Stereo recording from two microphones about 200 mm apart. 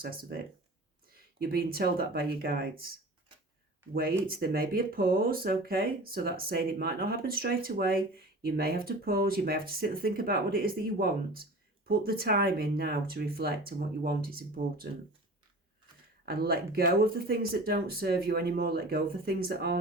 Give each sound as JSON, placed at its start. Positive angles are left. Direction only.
{"t": 0.0, "sound": "speech", "side_deg": -50}
{"t": 1.4, "sound": "speech", "side_deg": -50}
{"t": 3.9, "sound": "speech", "side_deg": -50}
{"t": 16.2, "sound": "speech", "side_deg": -50}